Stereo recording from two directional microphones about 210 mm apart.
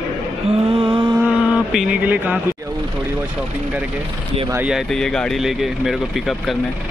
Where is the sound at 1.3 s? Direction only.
5° right (ahead or behind).